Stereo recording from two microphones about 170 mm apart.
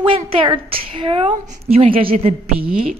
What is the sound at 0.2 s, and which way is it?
A woman's voice, 30° right (ahead or behind).